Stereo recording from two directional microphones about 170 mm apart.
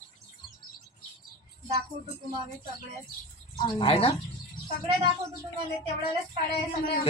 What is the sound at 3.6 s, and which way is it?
Speech, 30° left (ahead or behind).